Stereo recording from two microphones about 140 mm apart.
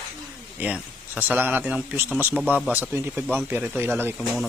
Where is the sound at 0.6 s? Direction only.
10° right (ahead or behind).